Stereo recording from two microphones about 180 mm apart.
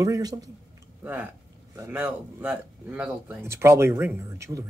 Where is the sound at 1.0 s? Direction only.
10° right (ahead or behind).